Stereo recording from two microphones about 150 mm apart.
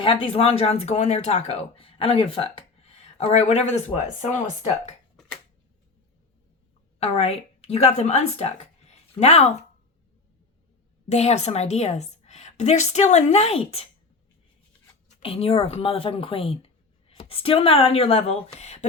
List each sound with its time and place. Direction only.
0.0 s speech: 35° left (ahead or behind); by 4.4 s 50° left (ahead or behind)
7.0 s a woman's voice: 40° left (ahead or behind)
11.1 s speech: 45° left (ahead or behind)
15.2 s speech: 40° left (ahead or behind)